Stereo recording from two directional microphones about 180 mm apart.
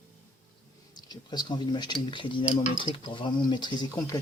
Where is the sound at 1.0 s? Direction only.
25° left (ahead or behind).